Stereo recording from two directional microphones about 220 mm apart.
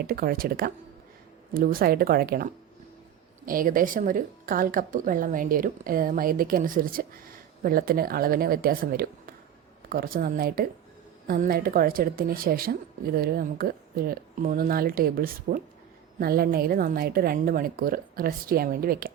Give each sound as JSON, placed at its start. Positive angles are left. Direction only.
{"t": 0.0, "sound": "a woman's voice", "side_deg": -40}